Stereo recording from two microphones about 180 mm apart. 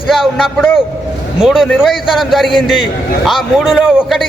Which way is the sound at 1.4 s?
Centre (ahead or behind).